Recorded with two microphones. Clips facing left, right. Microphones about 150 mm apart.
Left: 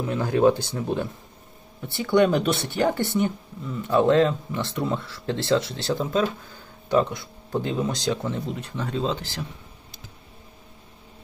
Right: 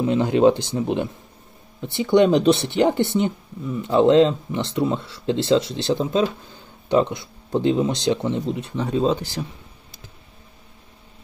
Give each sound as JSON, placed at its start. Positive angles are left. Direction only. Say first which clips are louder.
{"t": 0.0, "sound": "speech", "louder": "right 4 dB", "side_deg": -20}